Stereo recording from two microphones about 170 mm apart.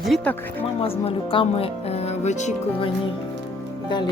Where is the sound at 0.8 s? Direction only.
35° left (ahead or behind).